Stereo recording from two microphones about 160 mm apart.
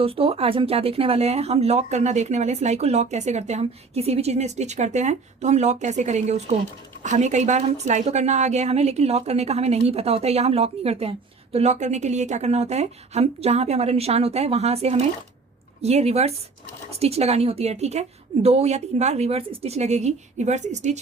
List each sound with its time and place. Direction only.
0.0 s a woman's voice: 35° right (ahead or behind)